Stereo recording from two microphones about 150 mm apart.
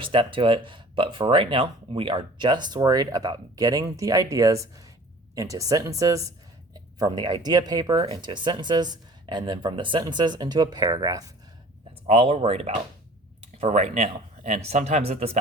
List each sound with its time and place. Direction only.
0.0 s speech: 35° right (ahead or behind)
12.0 s speech: 40° right (ahead or behind)